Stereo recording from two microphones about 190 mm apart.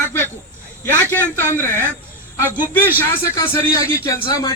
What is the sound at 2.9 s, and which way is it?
A man's voice, 10° left (ahead or behind).